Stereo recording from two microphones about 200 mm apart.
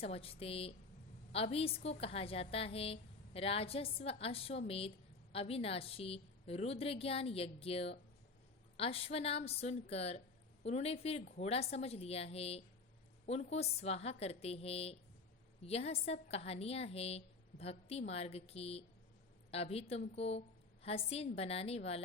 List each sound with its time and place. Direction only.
0.0 s a woman's voice: 30° left (ahead or behind)